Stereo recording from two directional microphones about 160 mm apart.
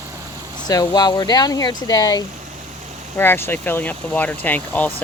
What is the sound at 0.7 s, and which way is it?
Speech, 25° left (ahead or behind).